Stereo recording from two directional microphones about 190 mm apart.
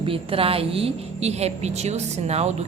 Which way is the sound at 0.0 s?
30° right (ahead or behind).